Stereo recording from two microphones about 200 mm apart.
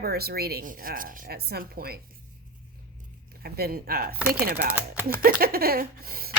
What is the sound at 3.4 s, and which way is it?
Speech, 50° right (ahead or behind).